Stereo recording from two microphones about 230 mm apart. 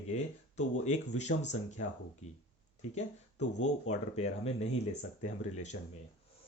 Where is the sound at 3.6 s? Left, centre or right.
Left.